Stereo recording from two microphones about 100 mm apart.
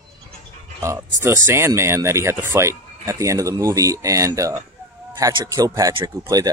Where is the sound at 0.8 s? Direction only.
25° right (ahead or behind).